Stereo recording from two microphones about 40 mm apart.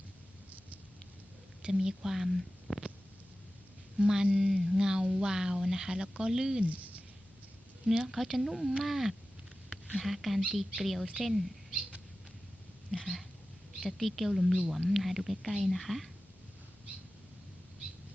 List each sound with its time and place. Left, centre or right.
1.7 s speech: centre
3.9 s speech: centre
6.7 s a sound: right
8.0 s speech: centre
12.9 s speech: centre